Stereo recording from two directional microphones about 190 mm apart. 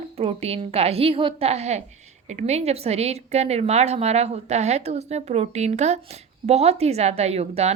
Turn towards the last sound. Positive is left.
turn(degrees=-35)  # may be behind; listen again after turning